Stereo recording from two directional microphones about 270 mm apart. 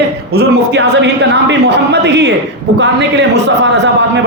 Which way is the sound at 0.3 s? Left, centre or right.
Right.